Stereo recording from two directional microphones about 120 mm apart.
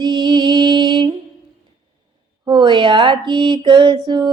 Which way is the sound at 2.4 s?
40° right (ahead or behind).